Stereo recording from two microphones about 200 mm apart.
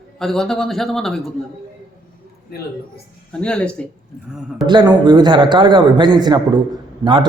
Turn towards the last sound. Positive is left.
turn(degrees=-25)  # may be behind; listen again after turning